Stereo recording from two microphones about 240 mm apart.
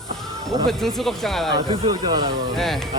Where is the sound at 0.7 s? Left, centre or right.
Centre.